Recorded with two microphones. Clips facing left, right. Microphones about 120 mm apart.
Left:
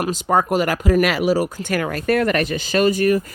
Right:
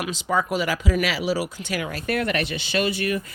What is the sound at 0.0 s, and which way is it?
Speech, 45° left (ahead or behind).